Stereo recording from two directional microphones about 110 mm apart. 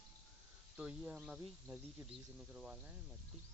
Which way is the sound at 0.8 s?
10° right (ahead or behind).